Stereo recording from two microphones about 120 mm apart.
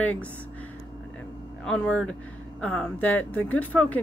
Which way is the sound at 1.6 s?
5° left (ahead or behind).